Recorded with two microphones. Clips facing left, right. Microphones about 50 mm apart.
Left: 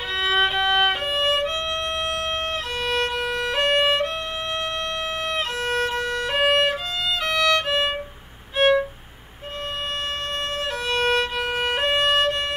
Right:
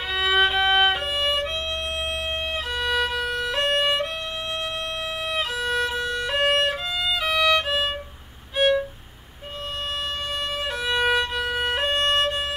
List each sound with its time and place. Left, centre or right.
0.1 s violin: centre
2.5 s violin: centre
5.2 s violin: centre
8.5 s violin: left
10.5 s music: centre